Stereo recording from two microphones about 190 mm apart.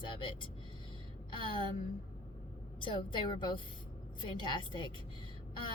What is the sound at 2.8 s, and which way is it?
A woman's voice, 25° left (ahead or behind).